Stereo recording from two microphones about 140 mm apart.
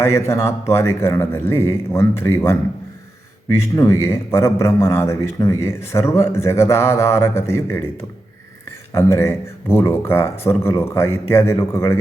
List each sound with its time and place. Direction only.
0.0 s a man's voice: 20° left (ahead or behind)
8.9 s a man's voice: 20° left (ahead or behind)